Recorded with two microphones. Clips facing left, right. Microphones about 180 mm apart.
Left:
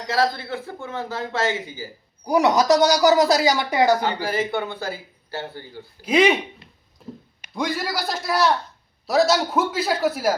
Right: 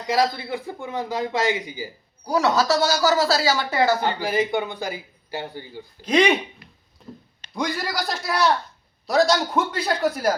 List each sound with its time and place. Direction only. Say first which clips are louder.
0.1 s a man's voice: right 1 dB; 15° right (ahead or behind)
2.2 s speech: left 3 dB; 15° left (ahead or behind)
4.2 s a man's voice: right 1 dB; 15° right (ahead or behind)
6.0 s a man's voice: left 1 dB; 5° left (ahead or behind)
7.0 s a sound: left 3 dB; centre (ahead or behind)
7.5 s a man's voice: left 1 dB; centre (ahead or behind)